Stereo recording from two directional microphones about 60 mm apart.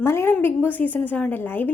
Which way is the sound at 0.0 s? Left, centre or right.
Left.